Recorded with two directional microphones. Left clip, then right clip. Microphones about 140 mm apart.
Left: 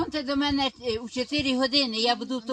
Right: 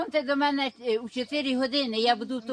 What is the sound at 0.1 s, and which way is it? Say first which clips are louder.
A man's voice: right 2 dB; 15° right (ahead or behind).